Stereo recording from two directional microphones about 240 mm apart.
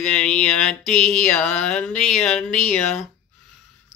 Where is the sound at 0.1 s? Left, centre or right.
Centre.